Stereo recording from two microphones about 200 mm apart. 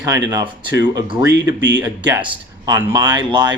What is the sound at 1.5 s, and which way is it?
Speech, 65° right (ahead or behind).